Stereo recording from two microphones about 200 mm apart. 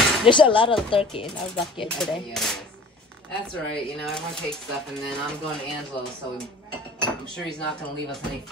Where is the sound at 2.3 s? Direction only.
Centre (ahead or behind).